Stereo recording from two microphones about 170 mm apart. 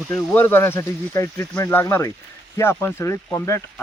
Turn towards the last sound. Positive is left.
turn(degrees=15)  # may be behind; listen again after turning